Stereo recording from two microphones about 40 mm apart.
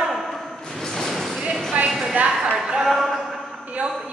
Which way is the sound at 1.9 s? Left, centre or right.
Centre.